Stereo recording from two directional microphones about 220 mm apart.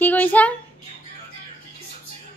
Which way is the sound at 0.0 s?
5° left (ahead or behind).